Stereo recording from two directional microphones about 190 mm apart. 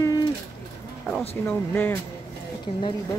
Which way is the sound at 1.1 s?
5° left (ahead or behind).